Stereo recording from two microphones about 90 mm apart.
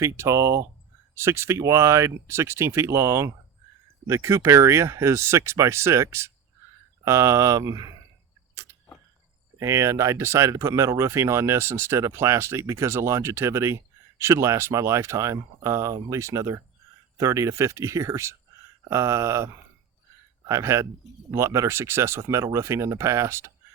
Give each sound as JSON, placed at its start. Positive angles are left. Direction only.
{"t": 0.0, "sound": "speech", "side_deg": -35}
{"t": 9.6, "sound": "speech", "side_deg": -35}
{"t": 20.5, "sound": "speech", "side_deg": -35}